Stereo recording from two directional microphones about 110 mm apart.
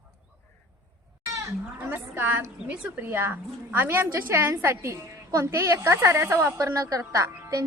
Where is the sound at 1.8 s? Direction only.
20° right (ahead or behind).